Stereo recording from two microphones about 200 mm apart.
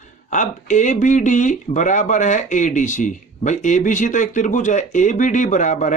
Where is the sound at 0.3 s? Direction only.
35° left (ahead or behind).